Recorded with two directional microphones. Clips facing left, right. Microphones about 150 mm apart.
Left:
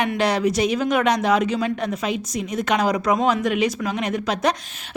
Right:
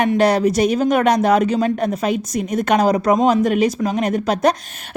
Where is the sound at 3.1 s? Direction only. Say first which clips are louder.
Right 5 dB; 40° right (ahead or behind).